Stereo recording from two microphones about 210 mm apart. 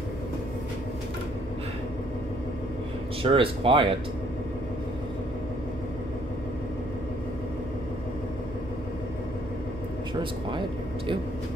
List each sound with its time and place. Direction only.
3.2 s speech: 25° right (ahead or behind)